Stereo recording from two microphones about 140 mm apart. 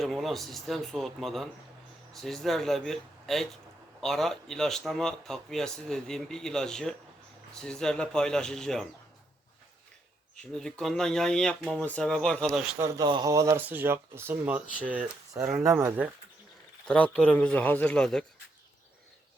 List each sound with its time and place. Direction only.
0.0 s speech: centre (ahead or behind)
10.3 s speech: 5° left (ahead or behind)
13.1 s speech: 30° right (ahead or behind)
16.8 s a man's voice: 10° left (ahead or behind)